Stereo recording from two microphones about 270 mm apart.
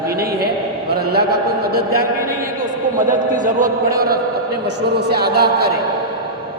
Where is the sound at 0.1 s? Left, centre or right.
Right.